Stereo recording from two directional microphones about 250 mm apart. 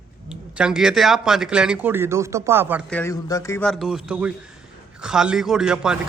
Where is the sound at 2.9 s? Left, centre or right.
Centre.